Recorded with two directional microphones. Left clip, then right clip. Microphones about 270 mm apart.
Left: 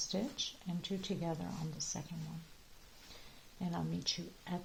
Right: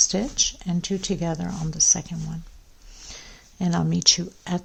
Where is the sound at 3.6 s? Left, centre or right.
Right.